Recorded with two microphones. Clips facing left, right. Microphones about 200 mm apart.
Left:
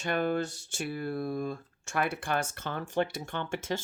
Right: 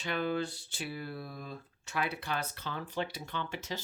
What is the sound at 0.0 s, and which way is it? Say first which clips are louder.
Speech: left 4 dB; 50° left (ahead or behind).